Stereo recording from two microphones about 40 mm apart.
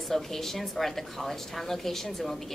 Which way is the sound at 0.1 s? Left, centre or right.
Centre.